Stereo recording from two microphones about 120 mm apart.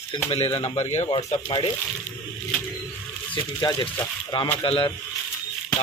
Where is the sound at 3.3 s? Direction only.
40° left (ahead or behind).